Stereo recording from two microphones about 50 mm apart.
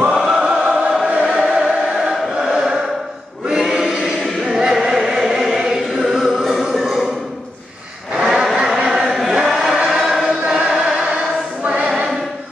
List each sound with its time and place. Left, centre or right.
0.2 s choir: centre
3.4 s chant: centre
4.5 s choir: centre
8.1 s vehicle: centre
8.5 s chant: centre
10.7 s choir: centre